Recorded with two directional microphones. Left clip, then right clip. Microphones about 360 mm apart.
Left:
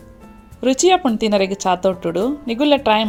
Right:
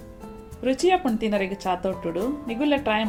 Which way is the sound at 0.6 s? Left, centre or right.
Left.